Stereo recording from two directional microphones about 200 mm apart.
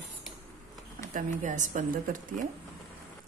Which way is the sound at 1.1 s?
40° right (ahead or behind).